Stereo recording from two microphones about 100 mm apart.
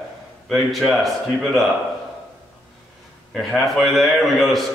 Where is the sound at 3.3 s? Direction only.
Centre (ahead or behind).